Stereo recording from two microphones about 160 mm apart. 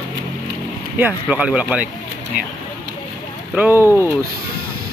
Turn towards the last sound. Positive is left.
turn(degrees=-15)  # may be behind; listen again after turning